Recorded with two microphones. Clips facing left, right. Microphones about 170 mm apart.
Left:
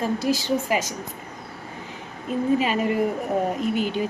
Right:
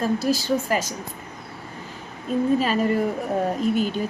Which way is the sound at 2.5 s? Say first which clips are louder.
Right 1 dB; 15° left (ahead or behind).